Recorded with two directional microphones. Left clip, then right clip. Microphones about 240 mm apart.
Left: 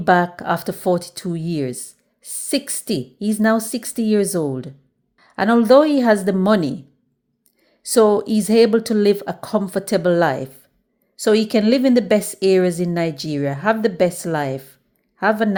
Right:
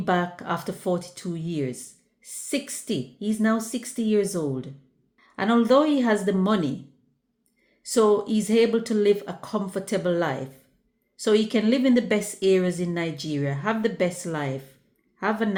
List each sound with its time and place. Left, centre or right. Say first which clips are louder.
0.0 s a woman's voice: left 9 dB; left
7.9 s a woman's voice: left 6 dB; left